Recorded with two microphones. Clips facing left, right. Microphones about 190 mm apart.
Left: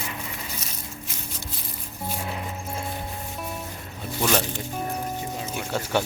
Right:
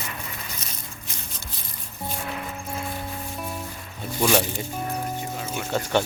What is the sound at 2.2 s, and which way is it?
Music, 20° left (ahead or behind).